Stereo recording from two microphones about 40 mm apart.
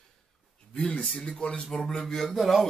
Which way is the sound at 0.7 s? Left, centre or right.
Left.